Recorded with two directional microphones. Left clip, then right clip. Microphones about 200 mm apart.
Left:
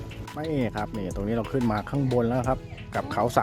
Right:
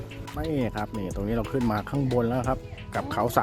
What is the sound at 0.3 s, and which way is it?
Speech, centre (ahead or behind).